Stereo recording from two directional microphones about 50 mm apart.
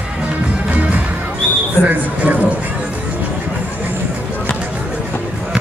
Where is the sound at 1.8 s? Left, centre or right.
Right.